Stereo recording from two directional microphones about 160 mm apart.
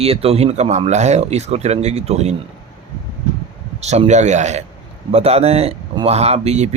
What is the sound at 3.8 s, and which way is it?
Speech, 45° right (ahead or behind).